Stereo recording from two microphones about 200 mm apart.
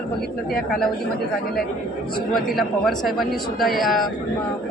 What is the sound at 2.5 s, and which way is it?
A woman's voice, centre (ahead or behind).